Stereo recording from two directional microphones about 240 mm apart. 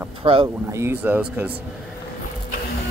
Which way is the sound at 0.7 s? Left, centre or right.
Centre.